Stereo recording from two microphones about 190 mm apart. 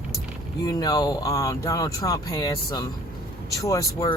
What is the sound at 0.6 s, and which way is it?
Speech, 20° left (ahead or behind).